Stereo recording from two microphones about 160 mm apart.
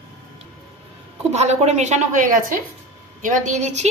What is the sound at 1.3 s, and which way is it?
A woman's voice, 45° right (ahead or behind).